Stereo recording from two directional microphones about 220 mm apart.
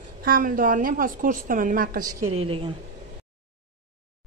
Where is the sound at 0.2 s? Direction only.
40° right (ahead or behind).